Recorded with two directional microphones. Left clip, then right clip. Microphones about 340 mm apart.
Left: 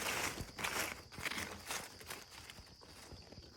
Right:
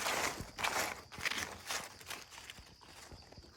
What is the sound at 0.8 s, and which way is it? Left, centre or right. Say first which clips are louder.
Walk: right 3 dB; centre.